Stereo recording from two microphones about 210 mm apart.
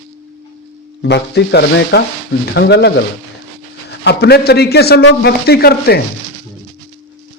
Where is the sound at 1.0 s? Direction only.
55° left (ahead or behind).